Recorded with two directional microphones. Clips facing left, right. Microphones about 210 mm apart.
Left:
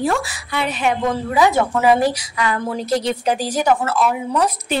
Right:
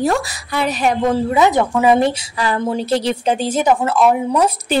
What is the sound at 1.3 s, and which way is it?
Speech, 20° right (ahead or behind).